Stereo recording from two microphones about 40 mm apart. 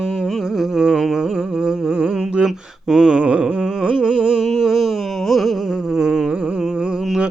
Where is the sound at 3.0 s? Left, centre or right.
Right.